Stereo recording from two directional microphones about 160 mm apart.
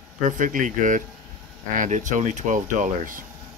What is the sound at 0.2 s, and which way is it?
Speech, 55° right (ahead or behind).